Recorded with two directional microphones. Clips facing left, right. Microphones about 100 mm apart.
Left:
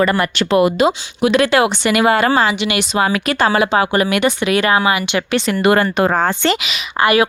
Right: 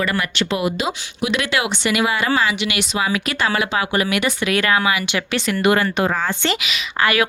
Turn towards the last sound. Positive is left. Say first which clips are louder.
# left 5 dB
turn(degrees=20)  # may be behind; listen again after turning